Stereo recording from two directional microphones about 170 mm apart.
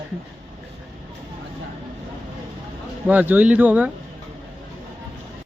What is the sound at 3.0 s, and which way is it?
Speech, 10° right (ahead or behind).